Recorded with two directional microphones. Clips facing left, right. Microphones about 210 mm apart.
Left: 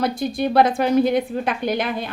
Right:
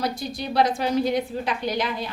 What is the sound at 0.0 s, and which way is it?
A woman's voice, 55° left (ahead or behind).